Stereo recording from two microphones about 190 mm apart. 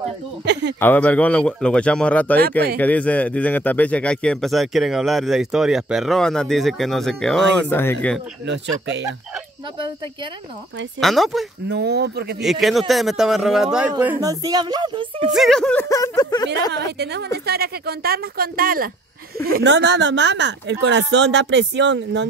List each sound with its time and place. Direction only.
0.5 s speech: 65° right (ahead or behind)
0.7 s speech: 10° left (ahead or behind)
8.5 s a woman's voice: 65° right (ahead or behind)
11.0 s speech: centre (ahead or behind)
11.7 s a woman's voice: 60° right (ahead or behind)
12.4 s speech: centre (ahead or behind)
14.0 s speech: 15° right (ahead or behind)
15.3 s speech: centre (ahead or behind); by 16.4 s 20° left (ahead or behind)
17.0 s a woman's voice: 60° right (ahead or behind)